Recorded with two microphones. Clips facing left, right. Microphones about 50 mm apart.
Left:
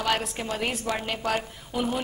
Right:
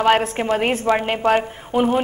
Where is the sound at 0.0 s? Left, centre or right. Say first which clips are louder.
Right 10 dB; right.